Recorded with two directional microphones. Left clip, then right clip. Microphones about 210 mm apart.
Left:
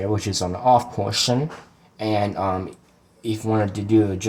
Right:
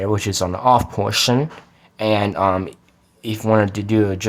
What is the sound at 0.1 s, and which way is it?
Speech, 40° right (ahead or behind).